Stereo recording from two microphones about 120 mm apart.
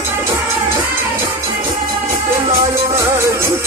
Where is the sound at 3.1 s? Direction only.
20° right (ahead or behind).